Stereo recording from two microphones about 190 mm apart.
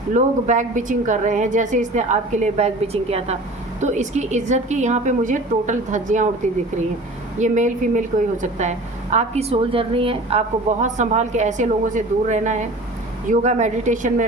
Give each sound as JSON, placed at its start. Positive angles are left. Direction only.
{"t": 0.1, "sound": "a woman's voice", "side_deg": -40}